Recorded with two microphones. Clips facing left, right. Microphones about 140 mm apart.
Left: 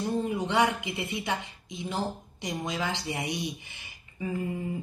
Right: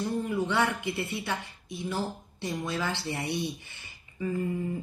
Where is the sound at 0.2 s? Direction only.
20° left (ahead or behind).